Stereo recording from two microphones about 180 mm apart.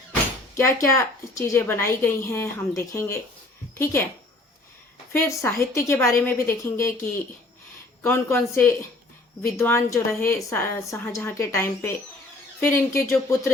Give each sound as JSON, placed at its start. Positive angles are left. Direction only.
{"t": 0.1, "sound": "speech", "side_deg": 15}
{"t": 5.2, "sound": "speech", "side_deg": 15}
{"t": 8.0, "sound": "speech", "side_deg": 15}